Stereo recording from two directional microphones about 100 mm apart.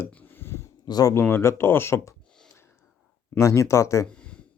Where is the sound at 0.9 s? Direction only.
40° left (ahead or behind).